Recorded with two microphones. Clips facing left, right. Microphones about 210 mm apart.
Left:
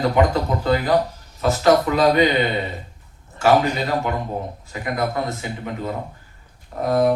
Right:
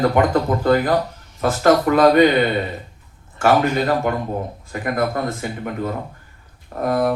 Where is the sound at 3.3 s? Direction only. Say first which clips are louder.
Right 1 dB; 50° right (ahead or behind).